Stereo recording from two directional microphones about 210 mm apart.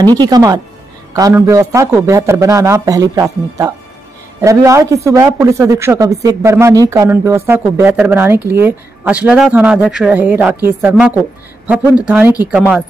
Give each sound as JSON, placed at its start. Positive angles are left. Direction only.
{"t": 0.0, "sound": "a man's voice", "side_deg": -20}